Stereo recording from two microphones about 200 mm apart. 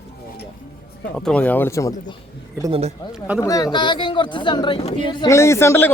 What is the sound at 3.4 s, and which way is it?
Speech, 15° left (ahead or behind).